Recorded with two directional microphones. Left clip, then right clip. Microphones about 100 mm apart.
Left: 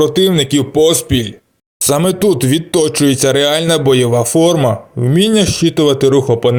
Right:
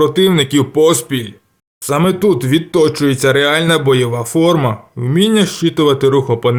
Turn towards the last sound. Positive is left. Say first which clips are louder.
# left 2 dB
turn(degrees=30)  # may be behind; listen again after turning